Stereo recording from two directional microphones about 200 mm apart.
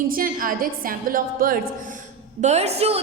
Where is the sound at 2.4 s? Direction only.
35° right (ahead or behind).